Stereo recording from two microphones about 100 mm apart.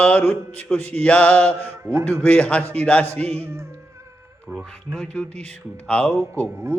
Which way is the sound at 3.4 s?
25° right (ahead or behind).